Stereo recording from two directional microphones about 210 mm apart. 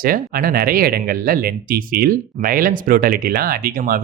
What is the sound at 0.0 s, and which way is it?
Speech, 45° right (ahead or behind).